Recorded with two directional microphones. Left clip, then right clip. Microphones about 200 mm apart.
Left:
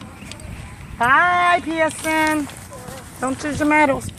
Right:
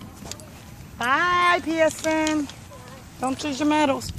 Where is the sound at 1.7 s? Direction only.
25° left (ahead or behind).